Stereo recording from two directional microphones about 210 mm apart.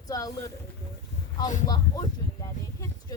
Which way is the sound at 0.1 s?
15° left (ahead or behind).